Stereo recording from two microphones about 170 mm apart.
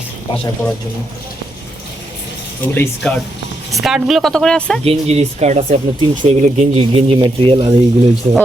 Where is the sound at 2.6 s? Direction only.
10° left (ahead or behind).